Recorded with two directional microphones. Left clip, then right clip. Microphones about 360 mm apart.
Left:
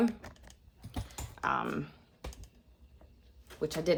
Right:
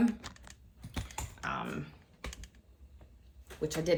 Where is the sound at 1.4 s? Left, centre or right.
Centre.